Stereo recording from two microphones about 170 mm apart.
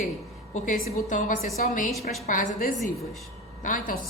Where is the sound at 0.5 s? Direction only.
50° left (ahead or behind).